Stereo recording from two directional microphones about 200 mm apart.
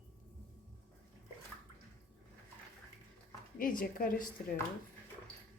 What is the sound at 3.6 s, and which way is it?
Speech, 45° left (ahead or behind).